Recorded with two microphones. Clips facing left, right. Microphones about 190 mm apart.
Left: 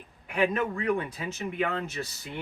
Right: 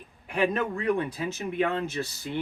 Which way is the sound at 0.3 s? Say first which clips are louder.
Right 1 dB; 35° right (ahead or behind).